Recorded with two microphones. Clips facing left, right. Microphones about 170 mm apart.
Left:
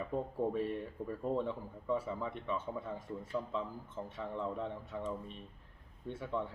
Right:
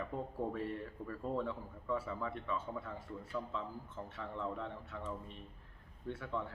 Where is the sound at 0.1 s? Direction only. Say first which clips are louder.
Left 7 dB; 20° left (ahead or behind).